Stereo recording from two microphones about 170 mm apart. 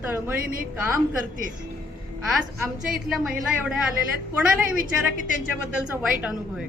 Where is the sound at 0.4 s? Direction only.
55° right (ahead or behind).